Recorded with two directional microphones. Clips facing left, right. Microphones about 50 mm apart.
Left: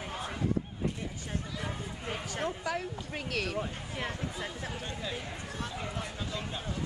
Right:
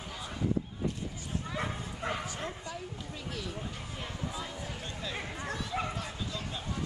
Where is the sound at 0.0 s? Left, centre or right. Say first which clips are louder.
Left 4 dB; left.